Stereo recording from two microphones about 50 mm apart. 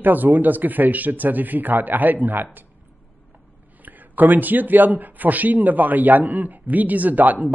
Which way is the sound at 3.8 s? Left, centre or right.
Right.